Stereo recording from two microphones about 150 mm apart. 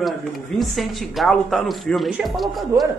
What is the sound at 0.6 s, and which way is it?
Speech, centre (ahead or behind).